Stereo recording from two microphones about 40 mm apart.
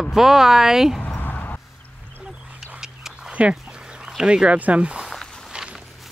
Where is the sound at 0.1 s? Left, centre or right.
Centre.